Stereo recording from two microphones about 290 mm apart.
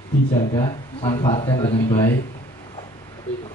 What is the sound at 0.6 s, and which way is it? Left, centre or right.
Speech, centre.